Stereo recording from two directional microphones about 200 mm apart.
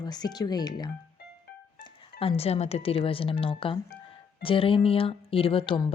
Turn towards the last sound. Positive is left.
turn(degrees=25)  # may be behind; listen again after turning